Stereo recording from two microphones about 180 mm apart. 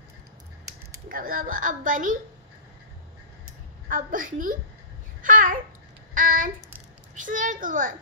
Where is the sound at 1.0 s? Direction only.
50° right (ahead or behind).